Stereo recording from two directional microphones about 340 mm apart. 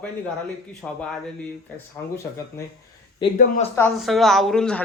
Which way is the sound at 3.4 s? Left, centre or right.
Left.